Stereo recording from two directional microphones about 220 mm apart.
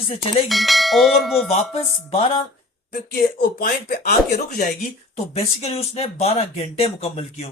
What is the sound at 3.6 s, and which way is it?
Speech, 40° left (ahead or behind).